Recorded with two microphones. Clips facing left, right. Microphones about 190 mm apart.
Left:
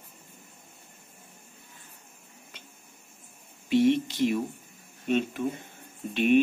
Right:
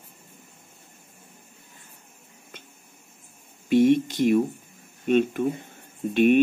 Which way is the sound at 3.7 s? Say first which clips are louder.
Right 4 dB; 50° right (ahead or behind).